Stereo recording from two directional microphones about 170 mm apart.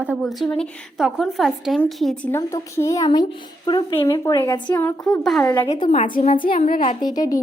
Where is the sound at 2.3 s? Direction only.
15° left (ahead or behind).